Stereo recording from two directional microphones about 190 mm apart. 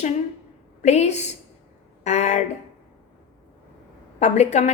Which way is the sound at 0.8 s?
35° left (ahead or behind).